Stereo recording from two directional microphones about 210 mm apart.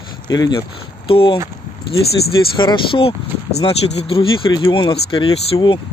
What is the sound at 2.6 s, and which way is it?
Speech, 25° left (ahead or behind).